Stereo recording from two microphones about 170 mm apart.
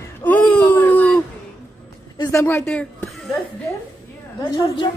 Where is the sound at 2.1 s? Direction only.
20° left (ahead or behind).